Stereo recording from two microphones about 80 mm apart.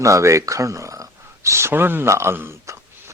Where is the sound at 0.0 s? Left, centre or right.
Right.